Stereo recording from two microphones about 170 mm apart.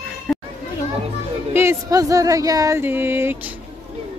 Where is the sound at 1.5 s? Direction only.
15° right (ahead or behind).